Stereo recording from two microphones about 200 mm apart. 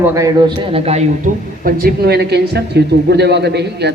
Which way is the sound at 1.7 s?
50° right (ahead or behind).